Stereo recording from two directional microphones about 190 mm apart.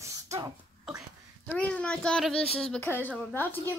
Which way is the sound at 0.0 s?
15° right (ahead or behind).